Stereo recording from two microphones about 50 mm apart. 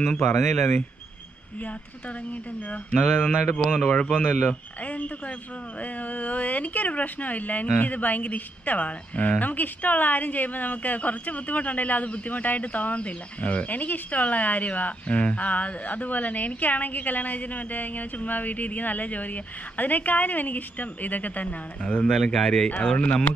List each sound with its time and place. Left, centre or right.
0.2 s speech: left
2.7 s speech: left
3.5 s speech: centre
22.1 s speech: centre